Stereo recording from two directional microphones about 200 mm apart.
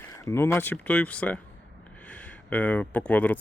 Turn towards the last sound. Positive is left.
turn(degrees=10)  # may be behind; listen again after turning